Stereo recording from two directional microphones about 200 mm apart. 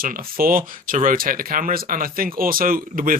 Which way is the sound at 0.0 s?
45° right (ahead or behind).